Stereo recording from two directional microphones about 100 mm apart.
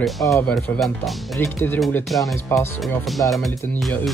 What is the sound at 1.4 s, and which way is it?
Speech, 25° left (ahead or behind).